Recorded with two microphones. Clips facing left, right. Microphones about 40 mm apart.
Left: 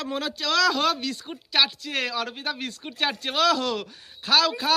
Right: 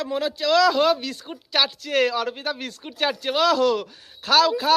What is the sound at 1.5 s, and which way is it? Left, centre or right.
Speech, left.